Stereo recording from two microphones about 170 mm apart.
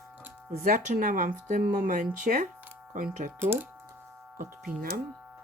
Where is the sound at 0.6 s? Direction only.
55° right (ahead or behind).